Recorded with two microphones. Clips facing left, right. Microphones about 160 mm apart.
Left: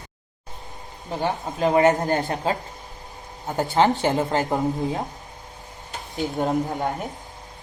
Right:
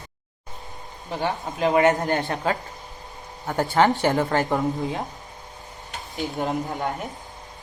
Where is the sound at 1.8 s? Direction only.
20° left (ahead or behind).